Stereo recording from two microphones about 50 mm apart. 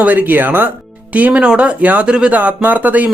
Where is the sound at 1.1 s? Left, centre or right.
Right.